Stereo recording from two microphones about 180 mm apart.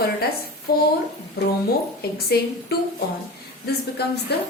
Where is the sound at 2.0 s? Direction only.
60° left (ahead or behind).